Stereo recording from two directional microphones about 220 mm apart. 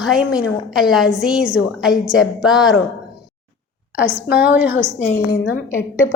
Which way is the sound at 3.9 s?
45° left (ahead or behind).